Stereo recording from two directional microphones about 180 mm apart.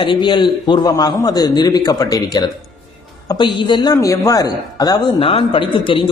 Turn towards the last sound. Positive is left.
turn(degrees=30)  # may be behind; listen again after turning